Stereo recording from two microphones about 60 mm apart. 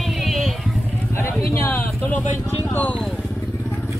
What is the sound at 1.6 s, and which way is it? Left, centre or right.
Speech, left.